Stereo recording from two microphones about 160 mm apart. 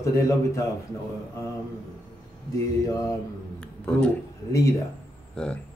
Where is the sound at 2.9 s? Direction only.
20° left (ahead or behind).